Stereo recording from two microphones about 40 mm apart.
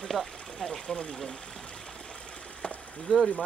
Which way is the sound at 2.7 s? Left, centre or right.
Left.